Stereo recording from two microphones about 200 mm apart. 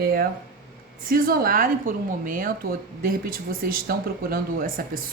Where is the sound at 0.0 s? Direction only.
50° right (ahead or behind).